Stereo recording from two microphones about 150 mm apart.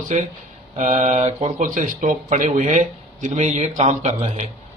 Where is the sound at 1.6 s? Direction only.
60° right (ahead or behind); by 4.4 s 45° right (ahead or behind).